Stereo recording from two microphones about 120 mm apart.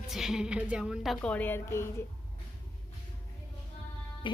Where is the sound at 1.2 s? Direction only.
10° left (ahead or behind).